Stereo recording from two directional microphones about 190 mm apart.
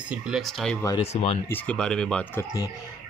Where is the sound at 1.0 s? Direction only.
35° left (ahead or behind).